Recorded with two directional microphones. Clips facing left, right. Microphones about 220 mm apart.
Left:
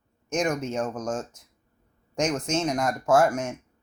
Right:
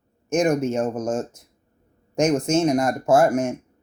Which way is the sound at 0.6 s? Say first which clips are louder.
Right 6 dB; 10° right (ahead or behind).